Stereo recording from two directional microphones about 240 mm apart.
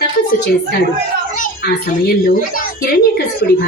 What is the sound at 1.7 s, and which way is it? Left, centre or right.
A woman's voice, left.